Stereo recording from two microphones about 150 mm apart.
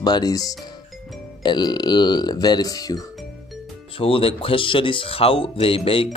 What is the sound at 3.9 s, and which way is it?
Speech, 40° left (ahead or behind).